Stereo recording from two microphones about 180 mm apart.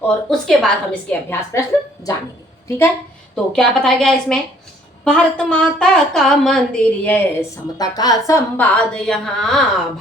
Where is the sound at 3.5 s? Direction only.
5° left (ahead or behind).